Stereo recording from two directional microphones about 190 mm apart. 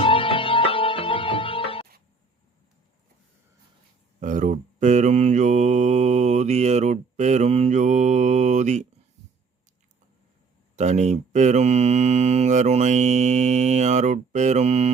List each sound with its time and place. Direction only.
0.0 s music: 25° left (ahead or behind)
4.2 s mantra: 45° right (ahead or behind)
10.8 s mantra: 35° right (ahead or behind)